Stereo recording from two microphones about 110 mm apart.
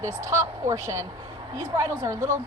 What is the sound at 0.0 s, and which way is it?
A woman's voice, 25° right (ahead or behind).